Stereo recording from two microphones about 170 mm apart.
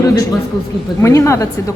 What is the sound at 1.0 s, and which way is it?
Speech, 15° left (ahead or behind).